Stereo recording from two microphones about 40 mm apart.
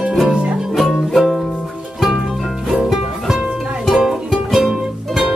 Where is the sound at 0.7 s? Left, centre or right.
Centre.